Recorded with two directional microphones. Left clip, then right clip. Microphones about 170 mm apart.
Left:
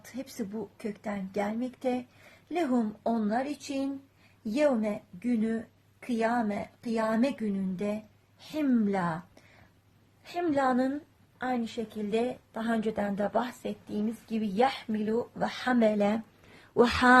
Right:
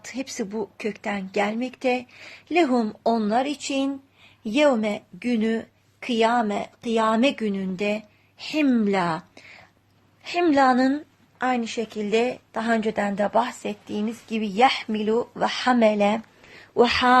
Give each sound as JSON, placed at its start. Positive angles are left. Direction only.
{"t": 0.3, "sound": "speech", "side_deg": -30}
{"t": 8.5, "sound": "speech", "side_deg": -35}
{"t": 10.3, "sound": "speech", "side_deg": -30}
{"t": 16.7, "sound": "speech", "side_deg": 15}